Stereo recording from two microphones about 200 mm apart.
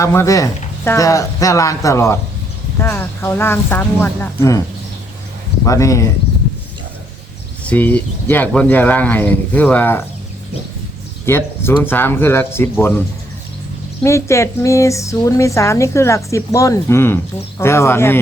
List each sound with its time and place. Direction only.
0.0 s speech: 15° left (ahead or behind)
5.6 s speech: 15° left (ahead or behind)
7.6 s speech: 5° left (ahead or behind)
11.3 s speech: 10° left (ahead or behind)
14.0 s speech: 15° left (ahead or behind)